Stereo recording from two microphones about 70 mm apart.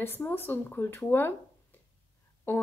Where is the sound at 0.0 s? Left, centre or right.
Left.